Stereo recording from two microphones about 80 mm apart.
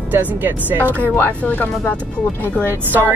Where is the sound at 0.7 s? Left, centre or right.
Left.